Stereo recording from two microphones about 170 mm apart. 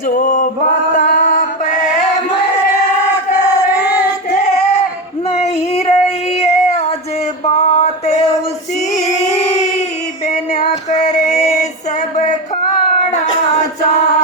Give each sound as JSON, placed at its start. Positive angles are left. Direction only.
{"t": 0.1, "sound": "male singing", "side_deg": 50}
{"t": 0.9, "sound": "music", "side_deg": 50}
{"t": 5.4, "sound": "female singing", "side_deg": 40}
{"t": 6.4, "sound": "a sound", "side_deg": 35}
{"t": 10.2, "sound": "female singing", "side_deg": 40}
{"t": 13.1, "sound": "a sound", "side_deg": 40}